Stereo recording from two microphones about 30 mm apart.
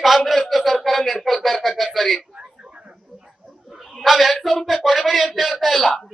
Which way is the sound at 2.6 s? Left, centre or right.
Right.